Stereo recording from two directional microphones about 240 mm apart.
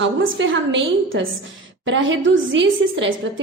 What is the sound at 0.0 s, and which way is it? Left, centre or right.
A woman's voice, right.